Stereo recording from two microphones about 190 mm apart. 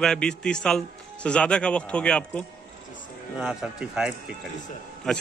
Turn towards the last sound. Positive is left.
turn(degrees=0)  # may be behind; listen again after turning